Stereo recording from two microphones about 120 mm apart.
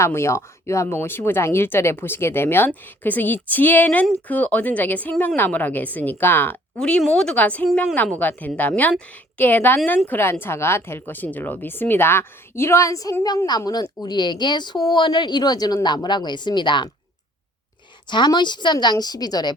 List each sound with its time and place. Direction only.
0.0 s a woman's voice: 20° left (ahead or behind); by 16.9 s 40° left (ahead or behind)
18.1 s speech: 40° left (ahead or behind)